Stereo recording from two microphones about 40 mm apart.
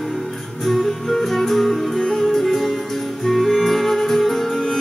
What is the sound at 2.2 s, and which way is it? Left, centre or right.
Music, centre.